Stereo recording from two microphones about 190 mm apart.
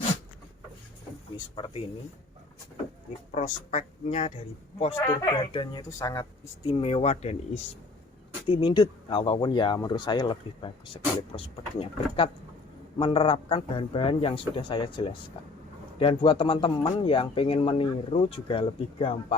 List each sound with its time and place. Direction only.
1.5 s speech: 25° left (ahead or behind)
3.3 s speech: 40° left (ahead or behind)
5.4 s speech: 25° left (ahead or behind)